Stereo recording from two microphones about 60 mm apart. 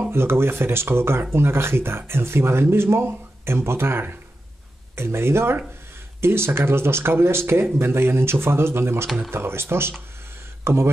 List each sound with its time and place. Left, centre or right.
0.1 s speech: right